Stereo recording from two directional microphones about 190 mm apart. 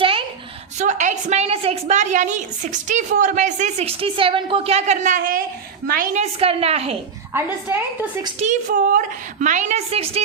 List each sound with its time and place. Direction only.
0.0 s a sound: 30° right (ahead or behind)
0.8 s a woman's voice: 40° right (ahead or behind)
6.4 s a woman's voice: 30° right (ahead or behind)
7.3 s a woman's voice: 10° right (ahead or behind)
8.4 s a woman's voice: 40° right (ahead or behind)